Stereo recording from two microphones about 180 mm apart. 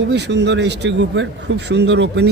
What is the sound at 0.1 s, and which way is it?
A man's voice, 70° right (ahead or behind).